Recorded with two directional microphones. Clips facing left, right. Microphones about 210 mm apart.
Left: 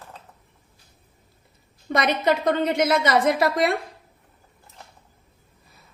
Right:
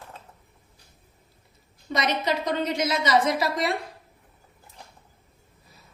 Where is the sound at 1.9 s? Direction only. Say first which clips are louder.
Left 5 dB; 55° left (ahead or behind).